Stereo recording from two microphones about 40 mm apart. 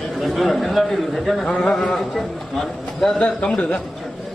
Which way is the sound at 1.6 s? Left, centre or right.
Centre.